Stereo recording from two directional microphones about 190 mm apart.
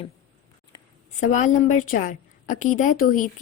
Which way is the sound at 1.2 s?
40° left (ahead or behind).